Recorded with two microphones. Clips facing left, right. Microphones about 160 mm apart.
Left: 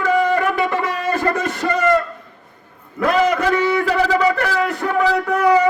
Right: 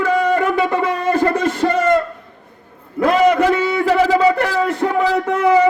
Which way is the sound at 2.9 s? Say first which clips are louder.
Right 3 dB; 25° right (ahead or behind).